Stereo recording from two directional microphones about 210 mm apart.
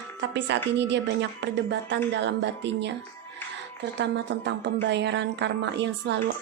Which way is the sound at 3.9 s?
55° right (ahead or behind).